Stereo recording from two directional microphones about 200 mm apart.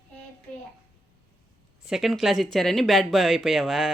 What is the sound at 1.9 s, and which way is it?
Speech, centre (ahead or behind).